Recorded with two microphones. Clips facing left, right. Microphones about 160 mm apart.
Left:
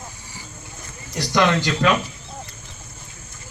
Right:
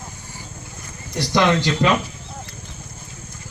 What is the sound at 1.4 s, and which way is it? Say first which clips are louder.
Speech: right 1 dB; 20° right (ahead or behind).